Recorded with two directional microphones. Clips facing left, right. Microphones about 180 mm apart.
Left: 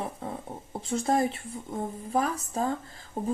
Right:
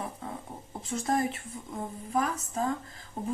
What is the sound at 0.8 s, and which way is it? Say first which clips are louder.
Speech: left 3 dB; 30° left (ahead or behind).